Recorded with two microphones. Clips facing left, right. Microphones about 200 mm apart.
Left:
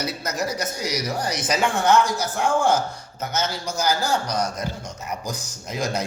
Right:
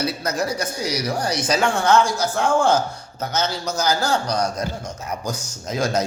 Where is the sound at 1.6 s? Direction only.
15° left (ahead or behind).